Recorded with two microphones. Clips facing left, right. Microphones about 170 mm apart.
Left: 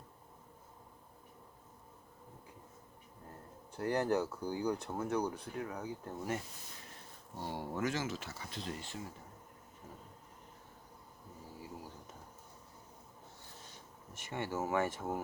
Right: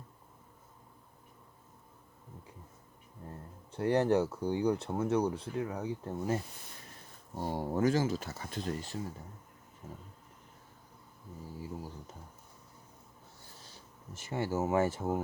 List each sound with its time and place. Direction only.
3.7 s speech: 25° right (ahead or behind)
7.3 s speech: 45° right (ahead or behind)
14.1 s speech: 30° right (ahead or behind)